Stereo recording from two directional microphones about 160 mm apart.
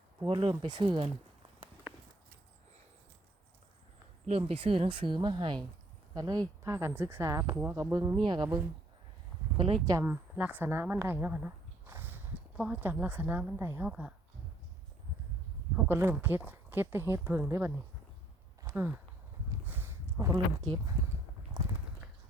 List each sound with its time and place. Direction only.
0.3 s speech: 30° right (ahead or behind)
4.3 s speech: 40° right (ahead or behind)
9.8 s speech: 20° right (ahead or behind)
10.1 s speech: 10° right (ahead or behind)
15.7 s speech: 15° right (ahead or behind)
18.6 s a sound: 15° right (ahead or behind)
20.3 s speech: 25° right (ahead or behind)
21.6 s clip-clop: 25° right (ahead or behind)